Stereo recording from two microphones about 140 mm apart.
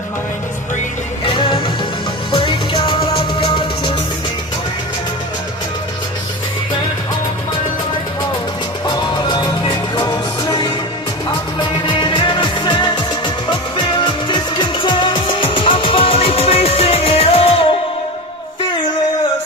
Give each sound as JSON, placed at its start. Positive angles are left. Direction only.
{"t": 1.2, "sound": "music", "side_deg": 40}
{"t": 8.9, "sound": "music", "side_deg": 30}
{"t": 11.9, "sound": "music", "side_deg": 35}